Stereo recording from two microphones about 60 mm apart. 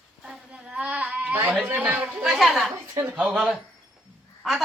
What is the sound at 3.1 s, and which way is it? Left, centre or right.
Speech, centre.